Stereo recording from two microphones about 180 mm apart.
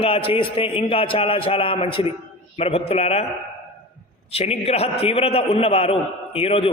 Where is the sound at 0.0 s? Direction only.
30° left (ahead or behind).